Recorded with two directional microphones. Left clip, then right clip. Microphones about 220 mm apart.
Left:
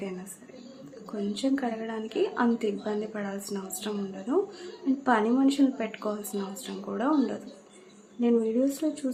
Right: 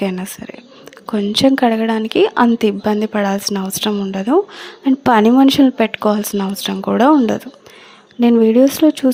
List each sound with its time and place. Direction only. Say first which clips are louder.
1.3 s speech: right 17 dB; 45° right (ahead or behind)